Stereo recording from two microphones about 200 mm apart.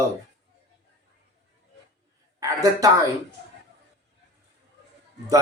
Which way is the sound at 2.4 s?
15° right (ahead or behind).